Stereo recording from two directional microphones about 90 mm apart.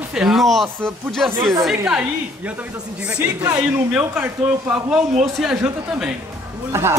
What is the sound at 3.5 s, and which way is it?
Speech, 15° right (ahead or behind).